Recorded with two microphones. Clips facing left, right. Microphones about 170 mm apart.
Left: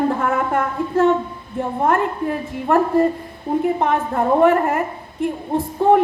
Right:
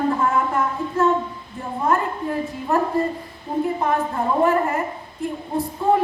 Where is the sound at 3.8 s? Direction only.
65° left (ahead or behind).